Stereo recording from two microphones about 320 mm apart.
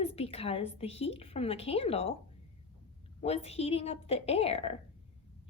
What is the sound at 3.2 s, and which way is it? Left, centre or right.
A woman's voice, centre.